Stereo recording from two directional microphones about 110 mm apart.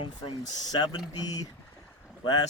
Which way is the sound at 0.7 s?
40° left (ahead or behind).